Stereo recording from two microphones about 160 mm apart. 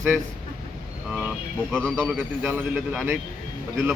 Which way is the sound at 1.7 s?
10° right (ahead or behind).